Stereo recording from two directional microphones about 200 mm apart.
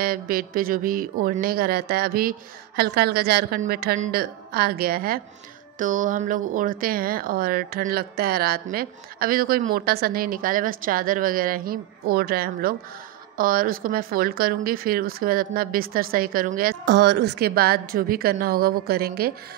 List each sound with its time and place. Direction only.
0.0 s speech: 45° right (ahead or behind)